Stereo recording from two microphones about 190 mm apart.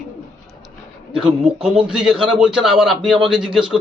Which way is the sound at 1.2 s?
Centre (ahead or behind).